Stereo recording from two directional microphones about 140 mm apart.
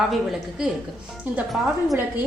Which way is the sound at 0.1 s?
Centre (ahead or behind).